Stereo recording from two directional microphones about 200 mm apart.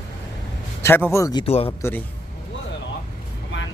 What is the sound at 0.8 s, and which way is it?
Speech, 10° left (ahead or behind).